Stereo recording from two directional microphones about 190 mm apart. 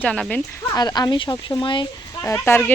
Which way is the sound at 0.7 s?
20° left (ahead or behind).